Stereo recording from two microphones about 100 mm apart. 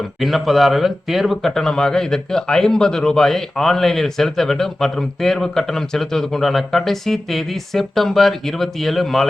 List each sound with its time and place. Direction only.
0.2 s speech: centre (ahead or behind)